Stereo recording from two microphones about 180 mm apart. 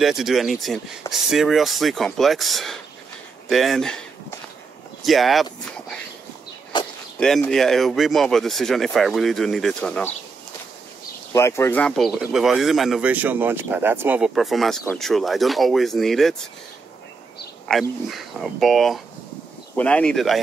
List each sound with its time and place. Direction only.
0.0 s speech: centre (ahead or behind)
5.0 s speech: centre (ahead or behind)
6.7 s a sound: 25° left (ahead or behind)
7.2 s speech: 5° left (ahead or behind)
11.3 s speech: 15° left (ahead or behind)
17.6 s speech: centre (ahead or behind)